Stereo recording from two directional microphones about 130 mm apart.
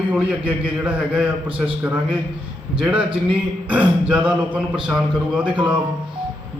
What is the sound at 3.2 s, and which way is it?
A man's voice, 10° right (ahead or behind).